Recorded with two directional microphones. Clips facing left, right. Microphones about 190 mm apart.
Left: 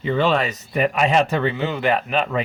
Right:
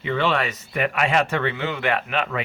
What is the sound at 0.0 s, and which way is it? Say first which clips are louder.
Speech: left 3 dB; 40° left (ahead or behind).